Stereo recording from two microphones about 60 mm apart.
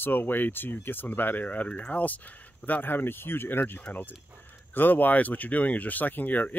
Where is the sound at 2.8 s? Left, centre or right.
Left.